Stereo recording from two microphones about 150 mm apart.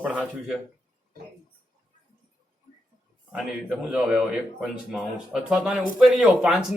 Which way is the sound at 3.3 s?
5° right (ahead or behind).